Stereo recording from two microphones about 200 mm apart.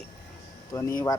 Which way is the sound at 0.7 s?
15° left (ahead or behind).